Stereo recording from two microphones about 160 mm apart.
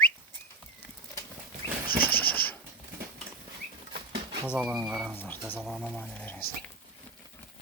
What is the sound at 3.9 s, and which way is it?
Bird flight, 35° right (ahead or behind).